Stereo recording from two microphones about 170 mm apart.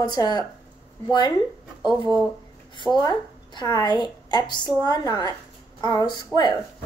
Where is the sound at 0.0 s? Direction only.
25° left (ahead or behind).